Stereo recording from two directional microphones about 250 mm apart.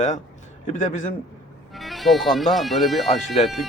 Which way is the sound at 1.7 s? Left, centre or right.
Centre.